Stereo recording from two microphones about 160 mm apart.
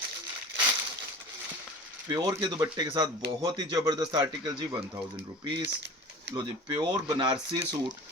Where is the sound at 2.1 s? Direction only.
25° right (ahead or behind).